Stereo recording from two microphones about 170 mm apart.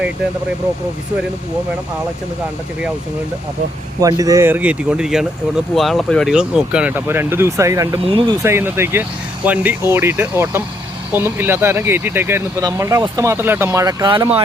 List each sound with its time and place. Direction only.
4.0 s speech: 20° right (ahead or behind)
8.0 s speech: 30° right (ahead or behind)
8.4 s speech: 15° right (ahead or behind)